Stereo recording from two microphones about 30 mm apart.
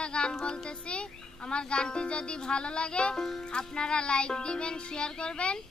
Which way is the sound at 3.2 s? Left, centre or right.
Centre.